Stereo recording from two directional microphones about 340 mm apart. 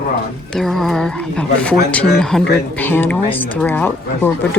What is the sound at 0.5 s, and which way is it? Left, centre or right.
Speech, centre.